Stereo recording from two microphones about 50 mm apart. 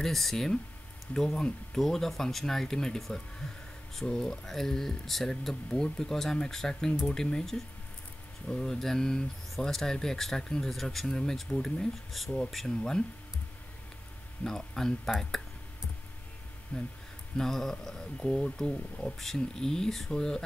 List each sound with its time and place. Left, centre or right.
0.0 s speech: centre
12.1 s speech: centre
14.4 s speech: centre
16.7 s speech: left
17.4 s speech: centre